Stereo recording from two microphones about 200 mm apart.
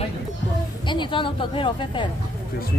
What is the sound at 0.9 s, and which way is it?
Speech, 25° left (ahead or behind).